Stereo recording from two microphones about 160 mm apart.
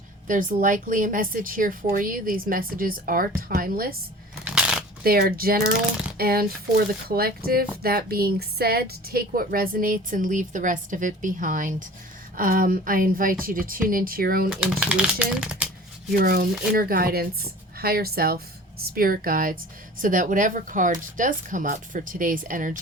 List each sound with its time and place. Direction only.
0.3 s a woman's voice: 55° right (ahead or behind)
4.4 s shuffling cards: 5° right (ahead or behind)
5.0 s a woman's voice: 70° right (ahead or behind)
14.5 s speech: 5° right (ahead or behind)
16.1 s a woman's voice: 65° right (ahead or behind)